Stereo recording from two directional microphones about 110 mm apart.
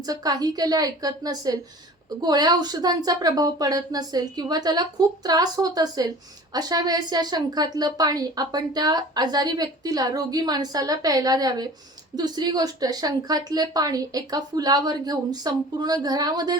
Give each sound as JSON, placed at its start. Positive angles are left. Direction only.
{"t": 0.0, "sound": "a woman's voice", "side_deg": -35}